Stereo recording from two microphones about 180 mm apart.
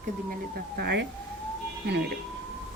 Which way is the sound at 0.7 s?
70° right (ahead or behind).